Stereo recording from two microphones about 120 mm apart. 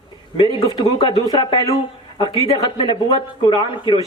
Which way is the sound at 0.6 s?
45° left (ahead or behind).